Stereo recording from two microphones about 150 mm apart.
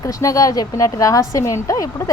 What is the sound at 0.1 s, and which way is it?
A woman's voice, 25° left (ahead or behind).